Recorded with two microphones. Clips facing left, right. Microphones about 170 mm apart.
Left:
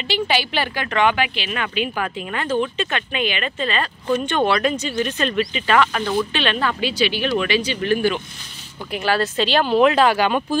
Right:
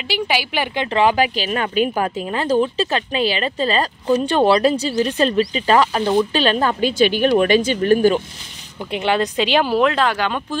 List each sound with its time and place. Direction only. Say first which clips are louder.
0.1 s speech: even; 10° right (ahead or behind)
0.7 s speech: right 4 dB; 30° right (ahead or behind)
8.9 s speech: right 2 dB; 20° right (ahead or behind)
9.8 s speech: left 2 dB; 5° left (ahead or behind)